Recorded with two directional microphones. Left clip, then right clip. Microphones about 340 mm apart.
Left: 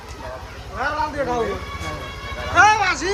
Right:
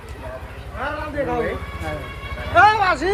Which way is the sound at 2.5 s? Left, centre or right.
Centre.